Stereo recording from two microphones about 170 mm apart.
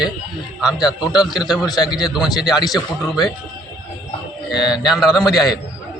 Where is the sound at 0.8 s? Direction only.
25° left (ahead or behind).